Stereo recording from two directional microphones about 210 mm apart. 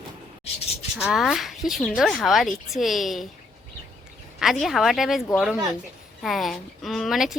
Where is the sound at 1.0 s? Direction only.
Centre (ahead or behind).